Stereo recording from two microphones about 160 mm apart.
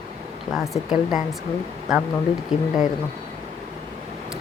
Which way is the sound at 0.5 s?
Centre (ahead or behind).